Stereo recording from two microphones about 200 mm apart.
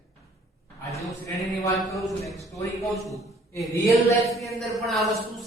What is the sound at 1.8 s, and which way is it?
Speech, centre (ahead or behind).